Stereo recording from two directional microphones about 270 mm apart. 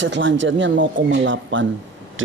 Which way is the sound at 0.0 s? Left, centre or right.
Right.